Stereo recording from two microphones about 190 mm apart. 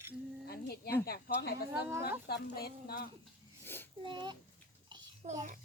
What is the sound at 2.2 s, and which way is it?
Speech, 55° left (ahead or behind).